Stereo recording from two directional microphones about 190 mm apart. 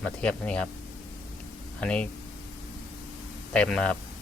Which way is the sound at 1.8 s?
5° left (ahead or behind).